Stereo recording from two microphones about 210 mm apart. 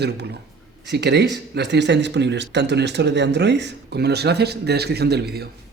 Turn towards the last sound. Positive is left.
turn(degrees=-50)  # may be behind; listen again after turning